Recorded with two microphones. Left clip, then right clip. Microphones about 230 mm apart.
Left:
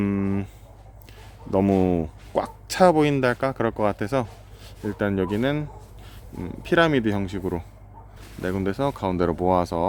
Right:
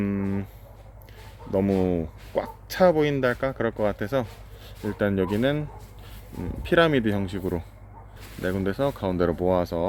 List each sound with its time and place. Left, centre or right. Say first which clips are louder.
0.0 s a sound: left 3 dB; centre
1.5 s speech: left 3 dB; left
4.9 s speech: even; centre